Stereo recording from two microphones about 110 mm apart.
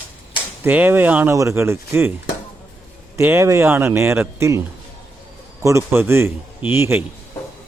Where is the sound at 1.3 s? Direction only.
25° right (ahead or behind).